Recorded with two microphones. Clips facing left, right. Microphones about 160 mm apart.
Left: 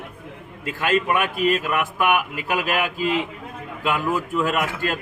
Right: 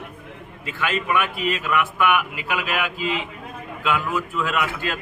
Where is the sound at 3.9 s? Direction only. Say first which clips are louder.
Left 2 dB; 40° left (ahead or behind).